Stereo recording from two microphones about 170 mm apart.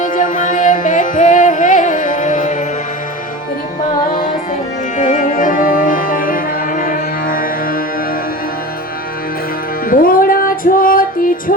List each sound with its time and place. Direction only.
0.0 s music: 50° left (ahead or behind)
4.9 s music: 45° left (ahead or behind)
9.9 s music: 55° left (ahead or behind)